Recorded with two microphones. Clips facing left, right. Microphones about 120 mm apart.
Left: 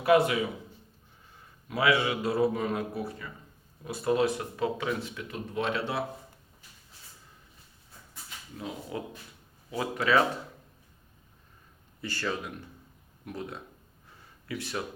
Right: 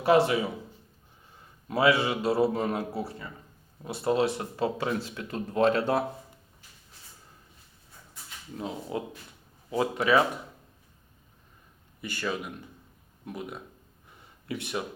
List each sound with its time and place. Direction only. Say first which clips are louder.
0.0 s speech: right 1 dB; 30° right (ahead or behind)
1.6 s speech: right 2 dB; 30° right (ahead or behind)
8.5 s speech: right 3 dB; 30° right (ahead or behind)
12.0 s speech: even; 15° right (ahead or behind)
13.2 s speech: right 1 dB; 25° right (ahead or behind)
14.1 s a sound: right 2 dB; 25° right (ahead or behind)